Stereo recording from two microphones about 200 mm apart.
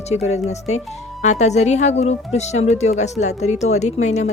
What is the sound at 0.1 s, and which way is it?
A woman's voice, 35° left (ahead or behind).